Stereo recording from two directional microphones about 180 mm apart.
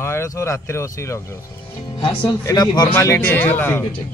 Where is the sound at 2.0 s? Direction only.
25° left (ahead or behind).